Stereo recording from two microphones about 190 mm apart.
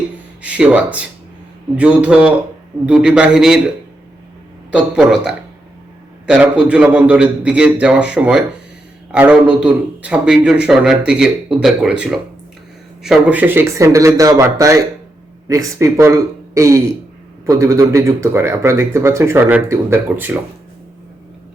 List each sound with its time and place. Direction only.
0.4 s a man's voice: 5° right (ahead or behind)
4.7 s a man's voice: 5° right (ahead or behind)